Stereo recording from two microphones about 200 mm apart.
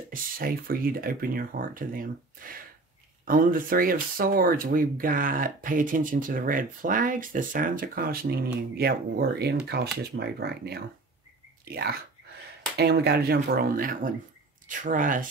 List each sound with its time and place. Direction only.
0.1 s speech: 45° right (ahead or behind)